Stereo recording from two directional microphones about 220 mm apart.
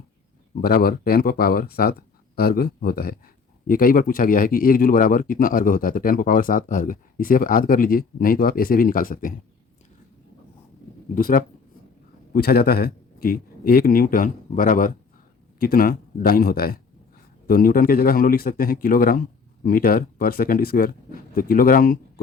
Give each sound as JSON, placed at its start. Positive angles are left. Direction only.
{"t": 0.6, "sound": "speech", "side_deg": 45}
{"t": 11.1, "sound": "speech", "side_deg": 40}